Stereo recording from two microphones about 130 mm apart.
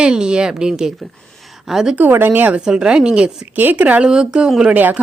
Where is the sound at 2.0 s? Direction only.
15° right (ahead or behind).